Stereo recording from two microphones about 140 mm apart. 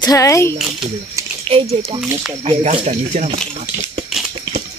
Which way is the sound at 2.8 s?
60° right (ahead or behind).